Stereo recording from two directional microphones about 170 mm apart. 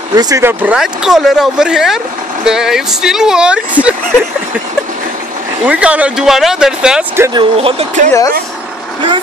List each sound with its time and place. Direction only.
0.1 s speech: 20° right (ahead or behind)
5.7 s speech: 10° right (ahead or behind)
7.3 s speech: 35° right (ahead or behind)
8.0 s speech: 45° right (ahead or behind)